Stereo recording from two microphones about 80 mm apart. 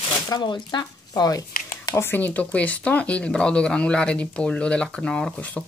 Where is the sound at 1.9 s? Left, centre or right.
Left; by 5.3 s centre.